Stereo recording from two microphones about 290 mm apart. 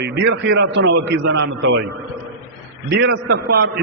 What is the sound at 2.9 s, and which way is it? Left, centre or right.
Speech, right.